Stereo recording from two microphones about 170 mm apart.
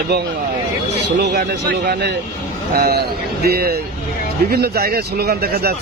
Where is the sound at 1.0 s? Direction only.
75° right (ahead or behind).